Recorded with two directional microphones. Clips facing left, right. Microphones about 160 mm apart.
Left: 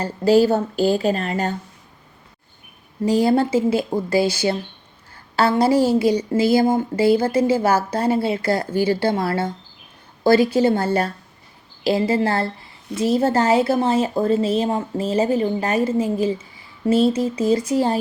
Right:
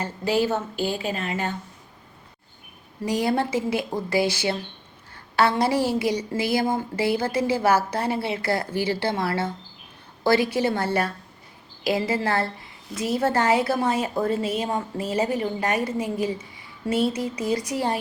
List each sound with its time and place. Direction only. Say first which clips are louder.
0.0 s a woman's voice: left 8 dB; 35° left (ahead or behind)
3.0 s a woman's voice: left 6 dB; 30° left (ahead or behind)
5.4 s a woman's voice: left 5 dB; 30° left (ahead or behind)